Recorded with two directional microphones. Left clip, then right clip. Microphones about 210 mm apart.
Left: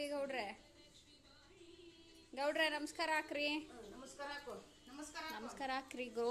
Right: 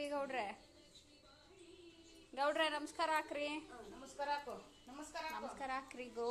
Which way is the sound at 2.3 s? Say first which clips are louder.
Right 1 dB; 15° left (ahead or behind).